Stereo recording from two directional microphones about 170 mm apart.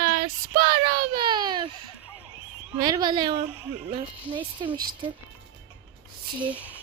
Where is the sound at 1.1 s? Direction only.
30° right (ahead or behind).